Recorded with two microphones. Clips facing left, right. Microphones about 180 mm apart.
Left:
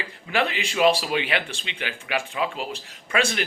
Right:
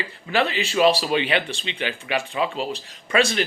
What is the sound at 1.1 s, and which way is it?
Speech, 10° left (ahead or behind).